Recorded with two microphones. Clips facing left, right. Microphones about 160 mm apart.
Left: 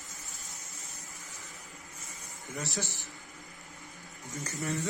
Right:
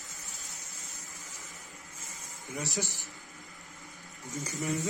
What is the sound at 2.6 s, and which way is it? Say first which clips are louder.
Speech: right 2 dB; 15° right (ahead or behind).